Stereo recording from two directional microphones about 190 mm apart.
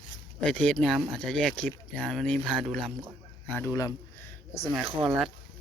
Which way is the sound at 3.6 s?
15° left (ahead or behind).